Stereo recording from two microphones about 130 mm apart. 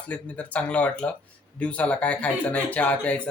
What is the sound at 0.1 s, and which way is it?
Speech, 10° left (ahead or behind).